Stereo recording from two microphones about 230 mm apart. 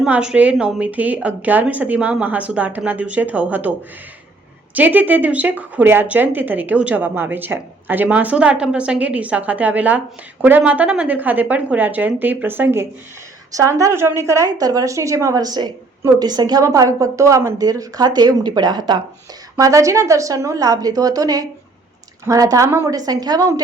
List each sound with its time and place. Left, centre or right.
0.0 s a woman's voice: centre